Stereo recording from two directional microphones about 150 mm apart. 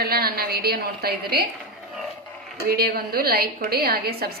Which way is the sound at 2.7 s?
90° right.